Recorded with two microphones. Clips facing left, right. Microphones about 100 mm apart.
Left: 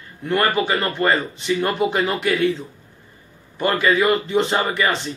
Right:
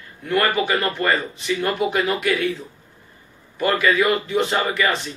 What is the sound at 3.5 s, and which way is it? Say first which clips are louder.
Speech: even; 30° left (ahead or behind).